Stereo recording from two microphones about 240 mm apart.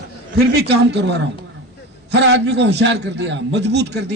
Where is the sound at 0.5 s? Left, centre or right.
Right.